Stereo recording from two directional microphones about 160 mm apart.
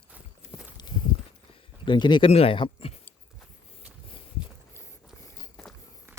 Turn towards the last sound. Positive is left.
turn(degrees=0)  # may be behind; listen again after turning